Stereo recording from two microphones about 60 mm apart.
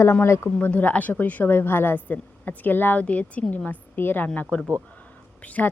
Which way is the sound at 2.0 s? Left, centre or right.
Left.